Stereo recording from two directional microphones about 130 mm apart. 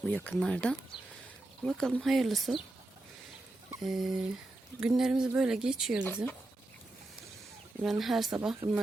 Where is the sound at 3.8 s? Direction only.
Centre (ahead or behind).